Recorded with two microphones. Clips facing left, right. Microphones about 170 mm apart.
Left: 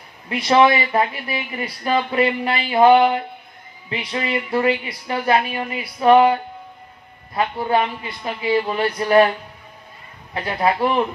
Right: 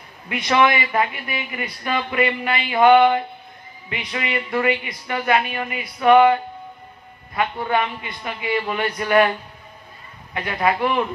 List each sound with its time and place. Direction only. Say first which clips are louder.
0.3 s speech: left 3 dB; 30° left (ahead or behind)
7.6 s speech: left 2 dB; 30° left (ahead or behind)
10.3 s speech: left 1 dB; 30° left (ahead or behind)